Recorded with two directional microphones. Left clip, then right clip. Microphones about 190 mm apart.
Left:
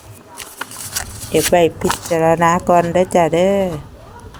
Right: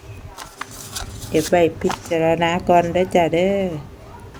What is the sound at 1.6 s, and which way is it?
Speech, 15° left (ahead or behind).